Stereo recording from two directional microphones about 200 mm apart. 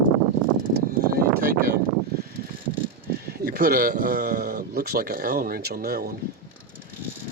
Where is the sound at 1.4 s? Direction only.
45° right (ahead or behind).